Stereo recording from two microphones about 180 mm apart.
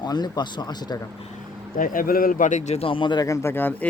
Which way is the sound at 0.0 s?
25° left (ahead or behind).